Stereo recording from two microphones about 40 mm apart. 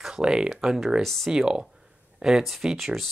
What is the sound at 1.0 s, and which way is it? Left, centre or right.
Speech, centre.